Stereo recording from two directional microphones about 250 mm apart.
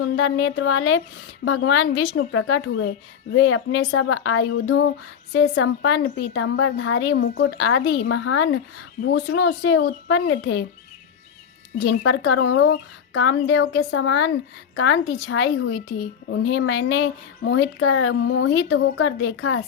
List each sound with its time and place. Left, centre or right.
0.0 s speech: left
11.9 s speech: left
12.5 s speech: left
13.1 s speech: left